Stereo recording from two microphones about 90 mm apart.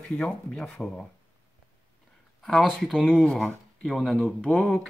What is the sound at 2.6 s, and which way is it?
Speech, centre (ahead or behind).